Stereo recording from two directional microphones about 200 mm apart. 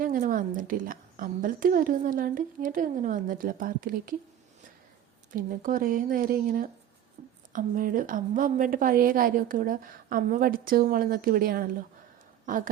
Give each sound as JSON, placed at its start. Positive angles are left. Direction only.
{"t": 0.0, "sound": "a woman's voice", "side_deg": -40}
{"t": 5.3, "sound": "a woman's voice", "side_deg": -40}